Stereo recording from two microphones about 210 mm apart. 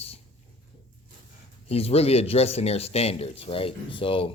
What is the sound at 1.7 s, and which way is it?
Speech, 30° left (ahead or behind).